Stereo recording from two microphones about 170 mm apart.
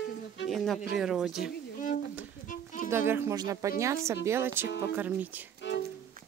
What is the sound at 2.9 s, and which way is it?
Speech, 15° right (ahead or behind).